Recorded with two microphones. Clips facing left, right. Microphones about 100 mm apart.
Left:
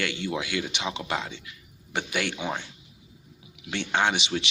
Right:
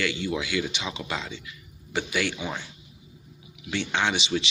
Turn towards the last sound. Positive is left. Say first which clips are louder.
# even
turn(degrees=55)  # may be behind; listen again after turning